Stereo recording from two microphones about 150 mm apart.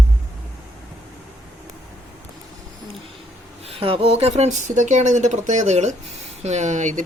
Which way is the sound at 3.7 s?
40° right (ahead or behind).